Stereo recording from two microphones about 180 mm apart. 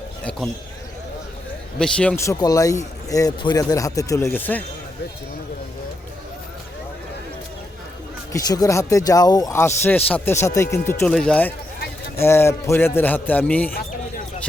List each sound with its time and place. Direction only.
1.8 s speech: 5° left (ahead or behind)
8.3 s speech: 20° left (ahead or behind)